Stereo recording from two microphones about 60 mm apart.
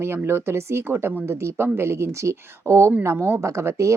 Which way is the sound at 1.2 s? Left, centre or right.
Right.